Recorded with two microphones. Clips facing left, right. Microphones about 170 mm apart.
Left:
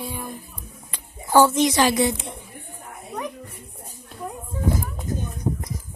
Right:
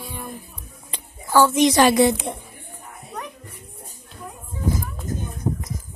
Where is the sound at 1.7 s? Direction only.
55° right (ahead or behind).